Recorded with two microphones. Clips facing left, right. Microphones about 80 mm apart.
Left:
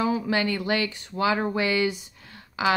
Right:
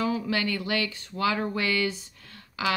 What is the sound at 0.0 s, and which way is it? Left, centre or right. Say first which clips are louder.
Speech: left 3 dB; left.